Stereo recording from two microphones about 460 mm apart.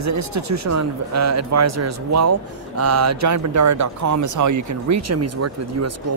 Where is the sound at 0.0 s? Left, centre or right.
Right.